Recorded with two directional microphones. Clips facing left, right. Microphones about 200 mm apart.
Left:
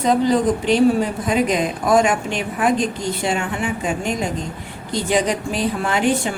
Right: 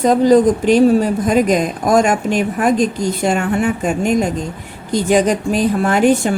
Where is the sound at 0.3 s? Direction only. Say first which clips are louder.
Right 6 dB; 45° right (ahead or behind).